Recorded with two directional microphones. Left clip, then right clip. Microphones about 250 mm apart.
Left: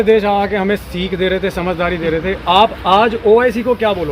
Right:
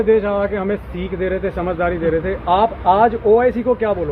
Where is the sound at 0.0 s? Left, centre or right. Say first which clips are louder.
Left 3 dB; left.